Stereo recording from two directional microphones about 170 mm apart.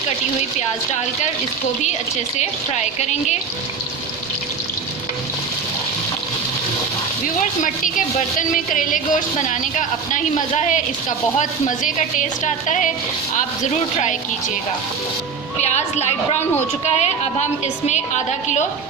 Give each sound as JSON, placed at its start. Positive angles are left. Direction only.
{"t": 2.4, "sound": "speech", "side_deg": 40}
{"t": 7.6, "sound": "speech", "side_deg": 50}
{"t": 14.0, "sound": "speech", "side_deg": 45}
{"t": 15.6, "sound": "a woman's voice", "side_deg": 40}